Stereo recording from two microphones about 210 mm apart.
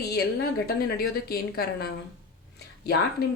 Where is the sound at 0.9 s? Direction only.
45° left (ahead or behind).